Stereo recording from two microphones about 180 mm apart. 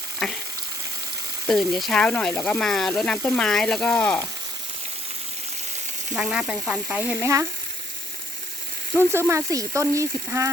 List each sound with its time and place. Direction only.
0.2 s frying: centre (ahead or behind)
1.5 s speech: centre (ahead or behind)
6.1 s speech: centre (ahead or behind)
9.0 s speech: 15° right (ahead or behind)